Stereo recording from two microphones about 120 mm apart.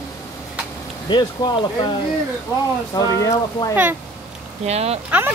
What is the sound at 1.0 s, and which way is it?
Speech, 40° left (ahead or behind).